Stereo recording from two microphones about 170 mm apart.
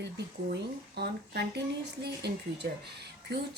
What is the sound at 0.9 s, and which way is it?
Speech, 70° right (ahead or behind).